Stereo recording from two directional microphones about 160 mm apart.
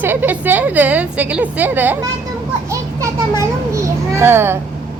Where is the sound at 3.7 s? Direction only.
15° right (ahead or behind).